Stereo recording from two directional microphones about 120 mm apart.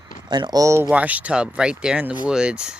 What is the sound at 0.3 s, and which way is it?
Speech, 40° right (ahead or behind).